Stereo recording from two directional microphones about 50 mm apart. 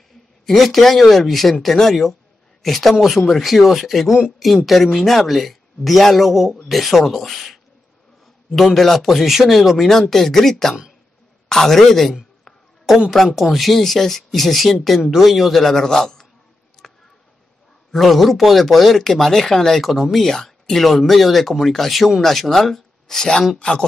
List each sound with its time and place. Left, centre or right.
0.5 s a man's voice: centre
12.4 s a sound: centre
13.1 s a man's voice: centre
16.8 s a sound: centre
17.9 s speech: centre
23.6 s speech: left